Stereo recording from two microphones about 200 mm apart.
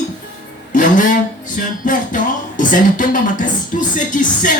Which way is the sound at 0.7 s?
40° left (ahead or behind).